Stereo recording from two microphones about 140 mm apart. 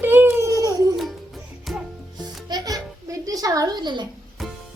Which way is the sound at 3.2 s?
25° right (ahead or behind).